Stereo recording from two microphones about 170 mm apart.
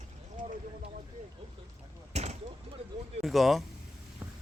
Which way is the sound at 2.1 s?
40° right (ahead or behind).